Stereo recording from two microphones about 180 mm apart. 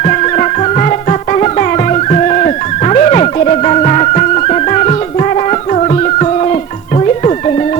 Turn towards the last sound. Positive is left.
turn(degrees=40)  # may be behind; listen again after turning